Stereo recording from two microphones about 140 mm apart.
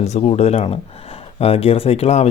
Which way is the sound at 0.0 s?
50° left (ahead or behind).